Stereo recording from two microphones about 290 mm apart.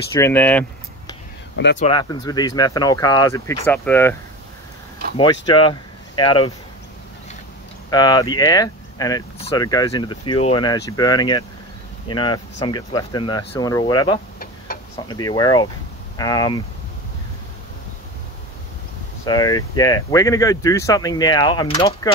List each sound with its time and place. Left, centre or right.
0.1 s speech: centre
1.8 s speech: centre
7.9 s speech: centre
19.2 s speech: centre